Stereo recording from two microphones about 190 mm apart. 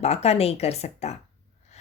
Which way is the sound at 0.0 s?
35° left (ahead or behind).